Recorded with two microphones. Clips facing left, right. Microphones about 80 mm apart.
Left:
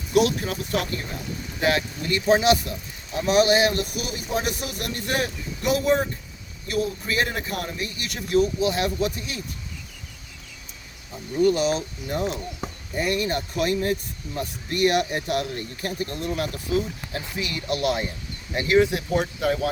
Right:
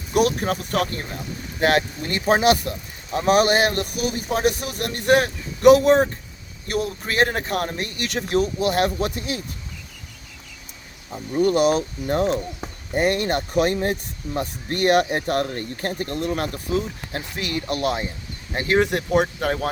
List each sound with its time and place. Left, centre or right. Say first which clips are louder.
0.1 s a man's voice: right 1 dB; right
11.3 s a man's voice: right 3 dB; right
18.8 s a man's voice: right 2 dB; right